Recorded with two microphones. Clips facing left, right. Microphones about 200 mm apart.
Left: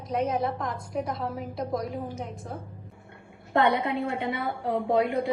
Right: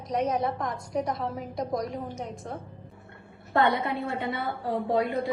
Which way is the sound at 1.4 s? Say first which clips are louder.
Even; 5° left (ahead or behind).